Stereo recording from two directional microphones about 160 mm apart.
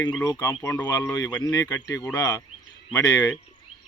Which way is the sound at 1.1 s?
25° left (ahead or behind).